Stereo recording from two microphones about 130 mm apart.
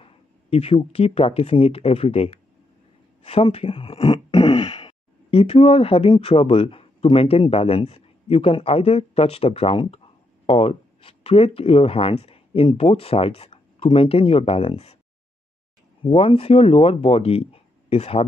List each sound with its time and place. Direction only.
0.0 s speech: 50° left (ahead or behind)
3.3 s a sound: 50° left (ahead or behind)
6.2 s speech: 50° left (ahead or behind)
16.0 s speech: 45° left (ahead or behind)